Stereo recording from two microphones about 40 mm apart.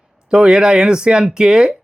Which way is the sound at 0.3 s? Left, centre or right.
Right.